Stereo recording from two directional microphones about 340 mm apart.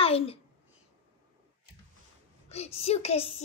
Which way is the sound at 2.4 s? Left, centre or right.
Centre.